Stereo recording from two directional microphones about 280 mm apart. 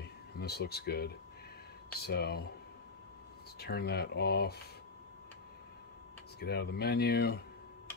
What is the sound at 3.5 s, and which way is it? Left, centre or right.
Speech, left.